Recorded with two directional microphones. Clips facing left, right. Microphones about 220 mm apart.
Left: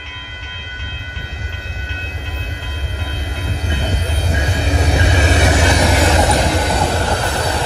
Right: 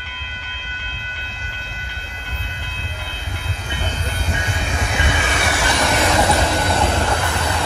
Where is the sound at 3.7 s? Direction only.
40° left (ahead or behind).